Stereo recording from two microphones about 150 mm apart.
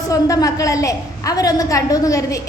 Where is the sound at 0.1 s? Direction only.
25° left (ahead or behind).